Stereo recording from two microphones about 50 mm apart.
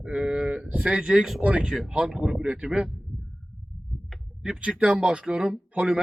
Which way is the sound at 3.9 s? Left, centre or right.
Centre.